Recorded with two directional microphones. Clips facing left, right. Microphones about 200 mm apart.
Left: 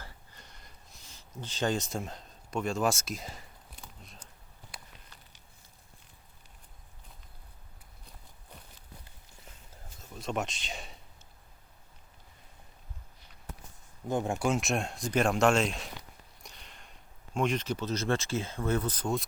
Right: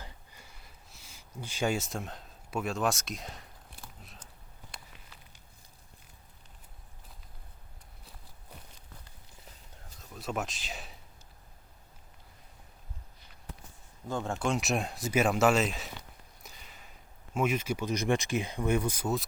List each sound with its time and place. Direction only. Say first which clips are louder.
0.0 s a sound: right 1 dB; 15° right (ahead or behind)
10.0 s speech: left 1 dB; centre (ahead or behind)
14.1 s speech: left 2 dB; 15° left (ahead or behind); by 19.2 s 10° right (ahead or behind)